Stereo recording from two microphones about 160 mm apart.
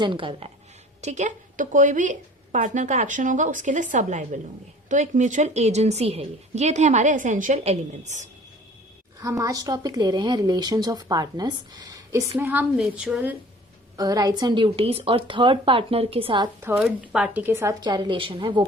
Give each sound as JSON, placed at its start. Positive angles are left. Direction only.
{"t": 0.0, "sound": "a woman's voice", "side_deg": -30}
{"t": 1.0, "sound": "a woman's voice", "side_deg": -50}
{"t": 9.2, "sound": "speech", "side_deg": -20}
{"t": 12.4, "sound": "speech", "side_deg": -10}
{"t": 13.9, "sound": "a woman's voice", "side_deg": -25}
{"t": 16.6, "sound": "speech", "side_deg": -10}
{"t": 17.8, "sound": "a woman's voice", "side_deg": -25}